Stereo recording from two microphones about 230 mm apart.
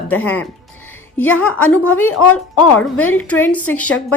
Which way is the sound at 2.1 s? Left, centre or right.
Left.